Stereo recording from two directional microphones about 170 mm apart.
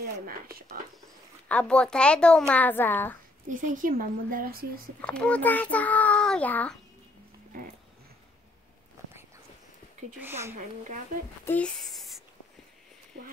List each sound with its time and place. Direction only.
0.0 s a woman's voice: 60° right (ahead or behind)
1.5 s a child's voice: 5° left (ahead or behind)
3.4 s a woman's voice: 50° right (ahead or behind)
5.0 s a child's voice: 5° left (ahead or behind)
10.2 s speech: 15° right (ahead or behind)
10.5 s speech: 50° right (ahead or behind)
11.4 s speech: 10° left (ahead or behind)